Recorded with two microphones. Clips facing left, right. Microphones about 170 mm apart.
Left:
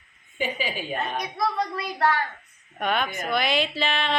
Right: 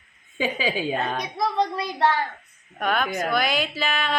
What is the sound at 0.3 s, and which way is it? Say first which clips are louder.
Speech: right 4 dB; 90° right.